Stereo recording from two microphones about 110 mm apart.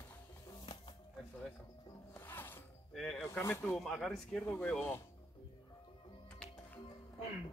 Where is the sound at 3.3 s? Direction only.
25° left (ahead or behind).